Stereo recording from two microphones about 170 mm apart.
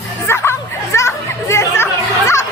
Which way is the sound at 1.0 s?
15° left (ahead or behind).